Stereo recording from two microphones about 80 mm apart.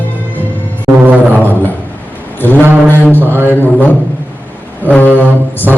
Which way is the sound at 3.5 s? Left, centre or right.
Left.